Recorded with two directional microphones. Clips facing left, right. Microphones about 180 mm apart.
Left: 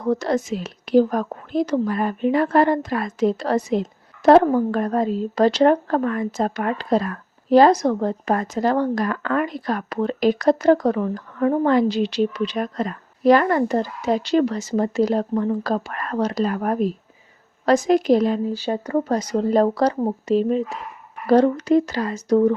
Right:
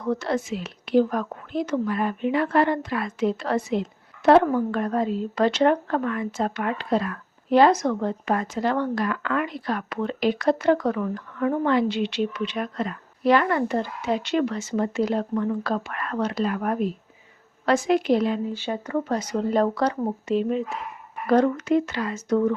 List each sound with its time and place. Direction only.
0.0 s speech: 40° left (ahead or behind)